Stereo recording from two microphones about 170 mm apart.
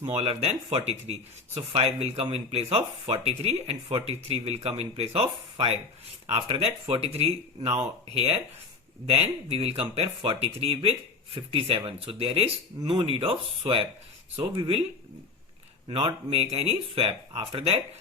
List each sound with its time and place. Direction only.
0.0 s speech: 35° right (ahead or behind)
15.9 s speech: 35° right (ahead or behind)